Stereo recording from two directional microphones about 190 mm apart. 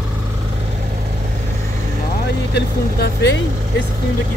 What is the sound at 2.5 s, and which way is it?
Speech, 65° left (ahead or behind).